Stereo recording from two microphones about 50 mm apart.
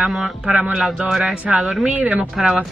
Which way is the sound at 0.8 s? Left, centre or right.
Centre.